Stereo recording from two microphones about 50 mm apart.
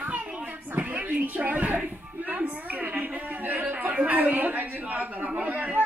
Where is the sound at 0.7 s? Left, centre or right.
Right.